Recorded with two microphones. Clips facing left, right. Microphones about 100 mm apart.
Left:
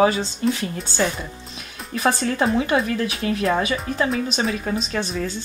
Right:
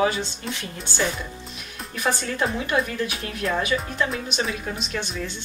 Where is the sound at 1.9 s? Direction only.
35° left (ahead or behind).